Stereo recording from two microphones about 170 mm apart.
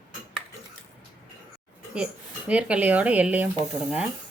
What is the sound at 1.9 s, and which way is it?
Speech, 5° right (ahead or behind).